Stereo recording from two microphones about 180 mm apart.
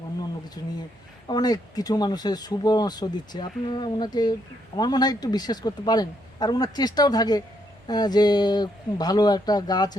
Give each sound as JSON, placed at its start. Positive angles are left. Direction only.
{"t": 0.6, "sound": "speech", "side_deg": 20}